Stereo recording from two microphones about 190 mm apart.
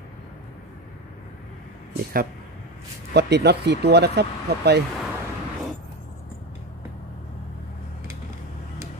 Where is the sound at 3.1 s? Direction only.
60° right (ahead or behind).